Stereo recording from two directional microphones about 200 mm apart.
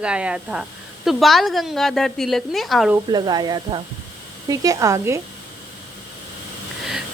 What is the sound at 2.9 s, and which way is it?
A woman's voice, 20° right (ahead or behind).